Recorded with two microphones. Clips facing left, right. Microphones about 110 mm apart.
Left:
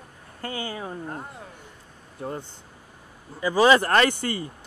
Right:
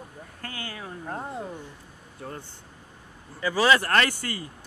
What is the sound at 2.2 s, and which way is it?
Speech, 20° left (ahead or behind).